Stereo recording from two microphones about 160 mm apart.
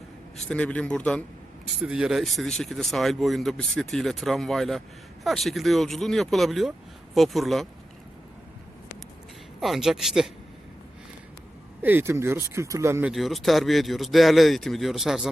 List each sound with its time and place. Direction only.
0.4 s a man's voice: 5° left (ahead or behind)
1.6 s speech: 5° right (ahead or behind)
9.6 s speech: centre (ahead or behind)
11.8 s speech: 10° right (ahead or behind)
13.1 s speech: centre (ahead or behind)